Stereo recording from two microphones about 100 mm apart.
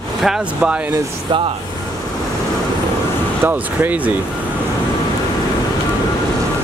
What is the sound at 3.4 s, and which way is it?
Speech, 15° right (ahead or behind).